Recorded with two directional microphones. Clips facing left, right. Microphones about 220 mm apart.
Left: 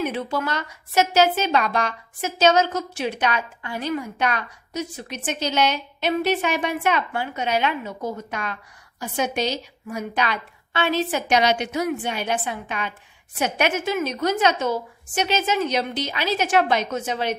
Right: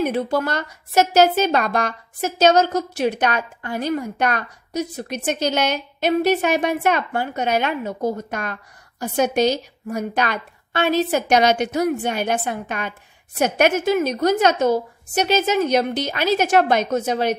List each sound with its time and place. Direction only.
0.0 s a woman's voice: 40° right (ahead or behind)